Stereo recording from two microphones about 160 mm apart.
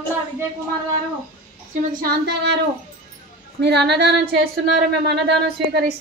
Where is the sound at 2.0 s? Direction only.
80° right.